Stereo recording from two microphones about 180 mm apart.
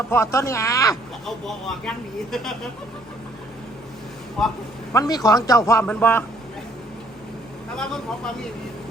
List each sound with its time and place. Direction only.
0.1 s speech: 15° left (ahead or behind)
1.5 s speech: centre (ahead or behind)
4.9 s a man's voice: 20° left (ahead or behind)
7.8 s speech: 5° left (ahead or behind)